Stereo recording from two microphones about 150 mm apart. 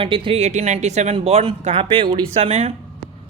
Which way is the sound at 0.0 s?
35° right (ahead or behind).